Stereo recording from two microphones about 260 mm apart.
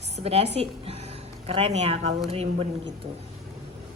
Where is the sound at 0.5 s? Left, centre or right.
Right.